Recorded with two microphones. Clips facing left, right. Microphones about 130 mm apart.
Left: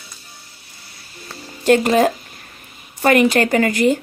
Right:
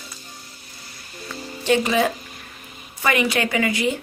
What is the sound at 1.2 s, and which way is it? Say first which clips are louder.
Music: left 6 dB; 45° left (ahead or behind).